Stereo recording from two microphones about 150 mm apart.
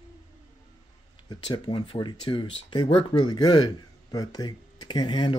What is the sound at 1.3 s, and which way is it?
Speech, 30° left (ahead or behind).